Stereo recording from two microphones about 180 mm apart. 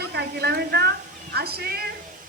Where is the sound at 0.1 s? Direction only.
65° right (ahead or behind).